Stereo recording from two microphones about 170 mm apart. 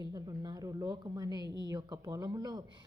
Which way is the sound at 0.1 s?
20° right (ahead or behind).